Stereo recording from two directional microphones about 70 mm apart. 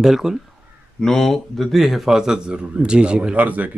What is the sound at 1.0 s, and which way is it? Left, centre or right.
Speech, centre.